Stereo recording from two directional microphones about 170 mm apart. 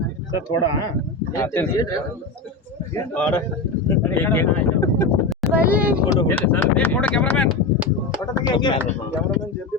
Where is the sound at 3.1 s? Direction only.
10° left (ahead or behind).